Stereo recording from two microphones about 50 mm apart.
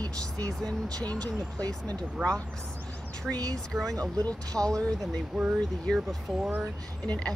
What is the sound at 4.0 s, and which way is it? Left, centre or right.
Speech, centre.